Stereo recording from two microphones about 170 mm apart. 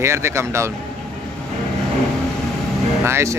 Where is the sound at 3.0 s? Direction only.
15° right (ahead or behind).